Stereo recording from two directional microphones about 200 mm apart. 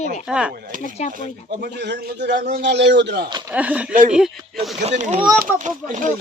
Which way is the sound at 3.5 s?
5° right (ahead or behind).